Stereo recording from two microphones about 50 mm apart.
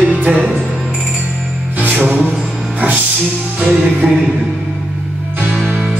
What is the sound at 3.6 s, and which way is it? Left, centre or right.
Music, right.